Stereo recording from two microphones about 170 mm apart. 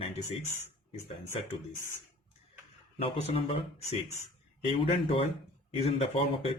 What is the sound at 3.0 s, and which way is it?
Speech, 35° left (ahead or behind).